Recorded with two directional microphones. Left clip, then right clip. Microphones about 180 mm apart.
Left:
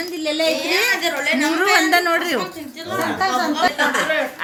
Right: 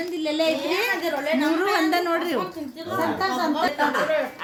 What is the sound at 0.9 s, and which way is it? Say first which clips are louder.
Speech: left 5 dB; 30° right (ahead or behind).